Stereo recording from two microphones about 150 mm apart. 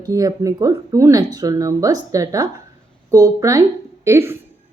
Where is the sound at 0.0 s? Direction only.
25° right (ahead or behind).